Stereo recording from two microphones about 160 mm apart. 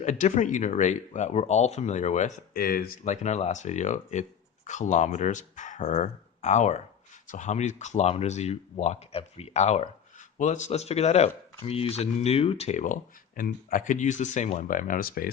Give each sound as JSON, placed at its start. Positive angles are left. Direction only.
{"t": 0.0, "sound": "speech", "side_deg": 50}
{"t": 3.0, "sound": "speech", "side_deg": 45}